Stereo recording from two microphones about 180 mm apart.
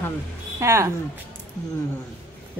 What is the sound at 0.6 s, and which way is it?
Speech, 15° right (ahead or behind).